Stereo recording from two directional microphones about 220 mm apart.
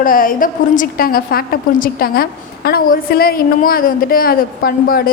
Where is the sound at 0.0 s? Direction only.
40° left (ahead or behind).